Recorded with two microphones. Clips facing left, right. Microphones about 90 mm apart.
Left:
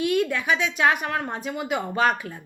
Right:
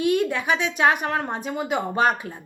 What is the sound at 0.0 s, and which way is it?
Speech, 25° right (ahead or behind).